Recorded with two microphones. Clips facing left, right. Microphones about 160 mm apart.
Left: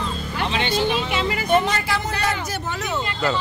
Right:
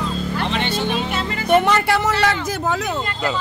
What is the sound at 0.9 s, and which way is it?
Music, 40° right (ahead or behind).